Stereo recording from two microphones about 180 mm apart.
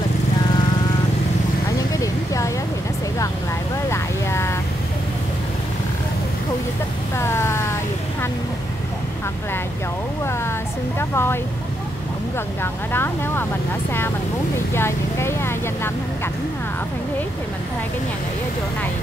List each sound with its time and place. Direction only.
2.0 s a sound: 20° left (ahead or behind)
3.9 s vehicle: 15° left (ahead or behind)
7.2 s a sound: 15° left (ahead or behind)
11.0 s vehicle: 15° left (ahead or behind)
12.9 s speech: 10° left (ahead or behind)
14.7 s vehicle: 15° left (ahead or behind)